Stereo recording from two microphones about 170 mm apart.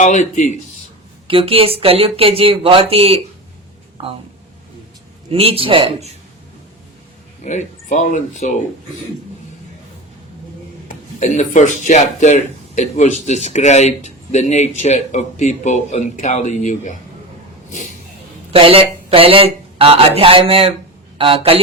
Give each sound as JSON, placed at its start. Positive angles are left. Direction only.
{"t": 0.0, "sound": "speech", "side_deg": 45}
{"t": 1.3, "sound": "speech", "side_deg": -30}
{"t": 5.3, "sound": "speech", "side_deg": -35}
{"t": 7.4, "sound": "speech", "side_deg": 45}
{"t": 10.8, "sound": "speech", "side_deg": 45}
{"t": 18.5, "sound": "speech", "side_deg": -35}